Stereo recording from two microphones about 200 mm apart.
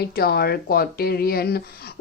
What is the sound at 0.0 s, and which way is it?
A woman's voice, 50° left (ahead or behind).